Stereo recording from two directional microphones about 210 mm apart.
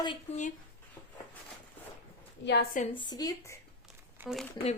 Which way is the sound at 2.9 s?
20° left (ahead or behind).